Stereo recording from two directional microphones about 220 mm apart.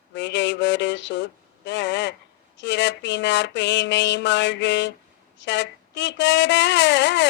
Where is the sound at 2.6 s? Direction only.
55° left (ahead or behind).